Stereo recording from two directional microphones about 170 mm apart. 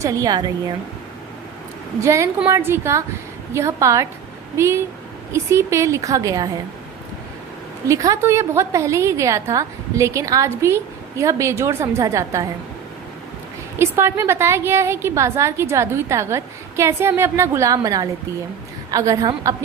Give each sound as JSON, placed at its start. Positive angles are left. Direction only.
{"t": 0.0, "sound": "a woman's voice", "side_deg": -20}
{"t": 2.0, "sound": "a woman's voice", "side_deg": -15}
{"t": 7.9, "sound": "a woman's voice", "side_deg": -20}
{"t": 13.7, "sound": "a woman's voice", "side_deg": -15}